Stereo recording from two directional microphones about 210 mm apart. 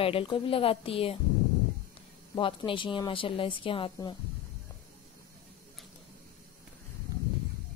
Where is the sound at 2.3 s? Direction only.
25° left (ahead or behind).